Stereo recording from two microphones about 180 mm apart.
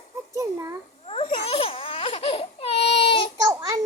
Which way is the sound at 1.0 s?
30° left (ahead or behind).